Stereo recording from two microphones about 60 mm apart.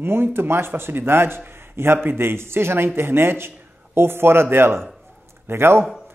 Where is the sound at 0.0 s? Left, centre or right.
Right.